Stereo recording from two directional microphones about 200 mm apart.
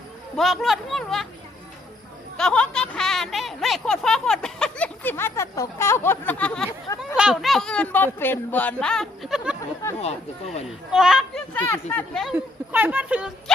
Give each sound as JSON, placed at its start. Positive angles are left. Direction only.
{"t": 0.3, "sound": "speech", "side_deg": 0}
{"t": 2.4, "sound": "speech", "side_deg": 5}
{"t": 10.0, "sound": "speech", "side_deg": 30}
{"t": 10.9, "sound": "speech", "side_deg": 0}
{"t": 12.7, "sound": "speech", "side_deg": -10}